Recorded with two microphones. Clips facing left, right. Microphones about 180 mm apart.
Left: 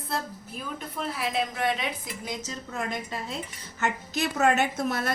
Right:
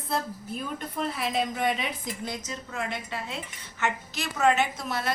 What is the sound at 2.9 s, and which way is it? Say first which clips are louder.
A woman's voice: left 1 dB; 40° left (ahead or behind).